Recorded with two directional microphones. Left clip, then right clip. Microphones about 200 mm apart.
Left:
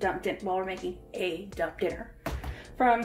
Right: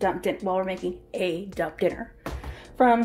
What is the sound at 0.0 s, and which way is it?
Speech, 55° right (ahead or behind).